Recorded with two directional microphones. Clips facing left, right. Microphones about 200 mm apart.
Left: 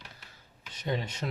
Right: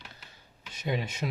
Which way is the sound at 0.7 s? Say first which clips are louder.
Right 1 dB; 10° right (ahead or behind).